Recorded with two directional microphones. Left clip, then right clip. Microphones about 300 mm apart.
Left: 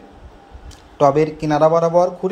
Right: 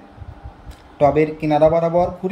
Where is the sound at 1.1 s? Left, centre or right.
Centre.